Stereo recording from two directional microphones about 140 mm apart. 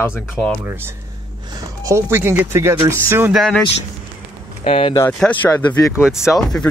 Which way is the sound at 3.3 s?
Centre (ahead or behind).